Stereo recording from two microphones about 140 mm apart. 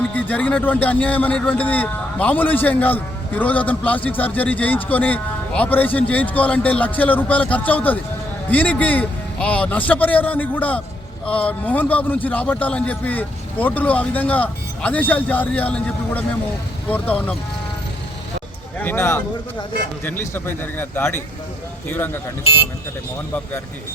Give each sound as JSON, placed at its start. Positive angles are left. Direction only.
{"t": 0.1, "sound": "a man's voice", "side_deg": 10}
{"t": 18.8, "sound": "a man's voice", "side_deg": 15}